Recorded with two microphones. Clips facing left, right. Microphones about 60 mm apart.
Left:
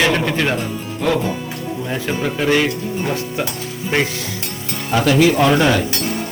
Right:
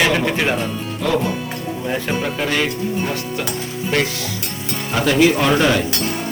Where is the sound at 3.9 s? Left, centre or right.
Left.